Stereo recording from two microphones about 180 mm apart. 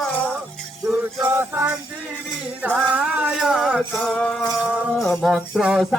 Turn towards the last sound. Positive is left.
turn(degrees=0)  # may be behind; listen again after turning